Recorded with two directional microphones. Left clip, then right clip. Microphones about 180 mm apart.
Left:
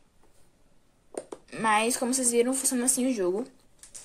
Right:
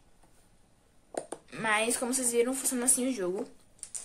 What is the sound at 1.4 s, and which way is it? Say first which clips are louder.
A woman's voice: left 5 dB; 15° left (ahead or behind).